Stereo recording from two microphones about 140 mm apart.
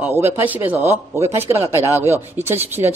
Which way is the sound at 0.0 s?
15° right (ahead or behind).